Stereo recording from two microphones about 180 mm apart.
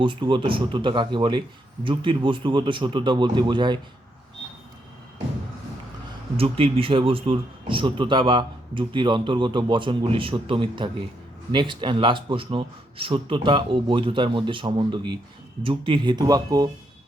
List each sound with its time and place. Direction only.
0.0 s speech: 25° right (ahead or behind)
6.3 s speech: 30° right (ahead or behind)